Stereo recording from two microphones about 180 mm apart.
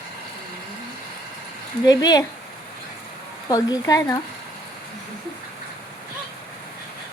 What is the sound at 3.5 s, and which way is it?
Speech, 20° left (ahead or behind).